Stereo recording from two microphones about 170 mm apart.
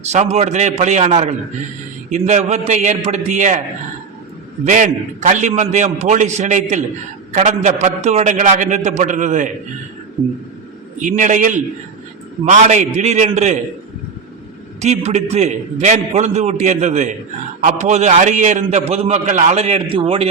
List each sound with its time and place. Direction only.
0.0 s a man's voice: 40° right (ahead or behind)
4.6 s a man's voice: 45° right (ahead or behind)
10.2 s a sound: 10° right (ahead or behind)
11.0 s a man's voice: 50° right (ahead or behind)
14.8 s a man's voice: 40° right (ahead or behind)